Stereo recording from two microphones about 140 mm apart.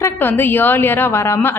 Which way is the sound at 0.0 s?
15° left (ahead or behind).